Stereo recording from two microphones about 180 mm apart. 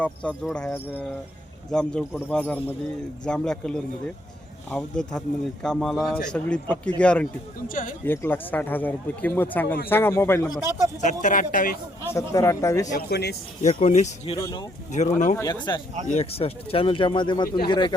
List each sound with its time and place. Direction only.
0.0 s a man's voice: 5° left (ahead or behind)
7.7 s speech: 50° left (ahead or behind)
8.0 s speech: 10° left (ahead or behind)
10.6 s speech: 15° right (ahead or behind)
11.0 s speech: 45° left (ahead or behind)
12.0 s speech: 15° left (ahead or behind)
13.0 s speech: 65° left (ahead or behind)
13.6 s speech: 40° left (ahead or behind)
14.3 s speech: 20° left (ahead or behind)
14.9 s speech: 40° left (ahead or behind)
15.4 s speech: 20° left (ahead or behind)
16.0 s speech: 35° left (ahead or behind)